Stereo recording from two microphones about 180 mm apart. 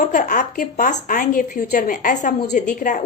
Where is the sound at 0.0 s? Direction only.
45° left (ahead or behind).